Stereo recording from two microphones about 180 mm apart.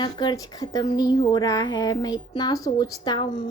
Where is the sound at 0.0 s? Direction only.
25° left (ahead or behind).